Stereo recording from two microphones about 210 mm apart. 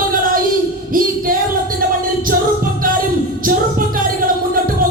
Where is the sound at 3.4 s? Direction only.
40° right (ahead or behind).